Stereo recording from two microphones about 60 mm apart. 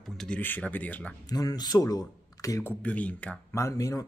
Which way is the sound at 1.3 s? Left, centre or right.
Left.